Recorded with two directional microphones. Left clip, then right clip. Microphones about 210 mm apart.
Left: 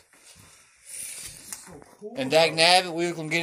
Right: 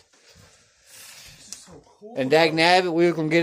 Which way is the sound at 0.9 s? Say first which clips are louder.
Left 3 dB; 35° right (ahead or behind).